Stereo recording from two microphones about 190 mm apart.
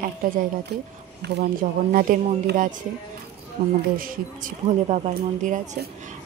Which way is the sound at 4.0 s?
45° right (ahead or behind).